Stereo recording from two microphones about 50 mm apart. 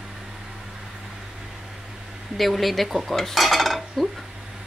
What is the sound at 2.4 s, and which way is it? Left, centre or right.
Speech, centre.